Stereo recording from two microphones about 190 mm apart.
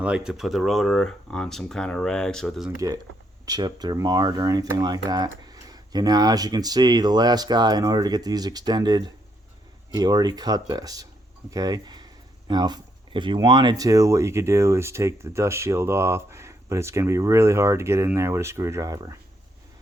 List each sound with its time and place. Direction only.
0.0 s speech: 5° right (ahead or behind)
2.7 s speech: 20° right (ahead or behind)